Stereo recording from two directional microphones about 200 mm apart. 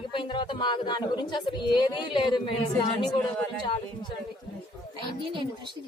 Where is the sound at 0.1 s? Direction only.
25° left (ahead or behind).